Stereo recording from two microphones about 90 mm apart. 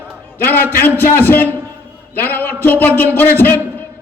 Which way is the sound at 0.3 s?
20° left (ahead or behind).